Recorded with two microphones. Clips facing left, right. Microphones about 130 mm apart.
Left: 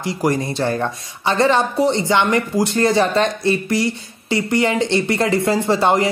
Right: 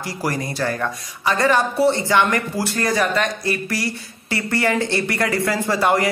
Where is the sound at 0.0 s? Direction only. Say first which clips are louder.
Left 5 dB; 20° left (ahead or behind).